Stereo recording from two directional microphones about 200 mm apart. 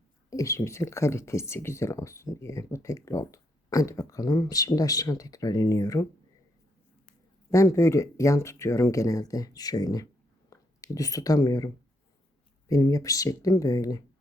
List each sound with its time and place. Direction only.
0.3 s speech: 15° left (ahead or behind)
7.5 s speech: 15° left (ahead or behind)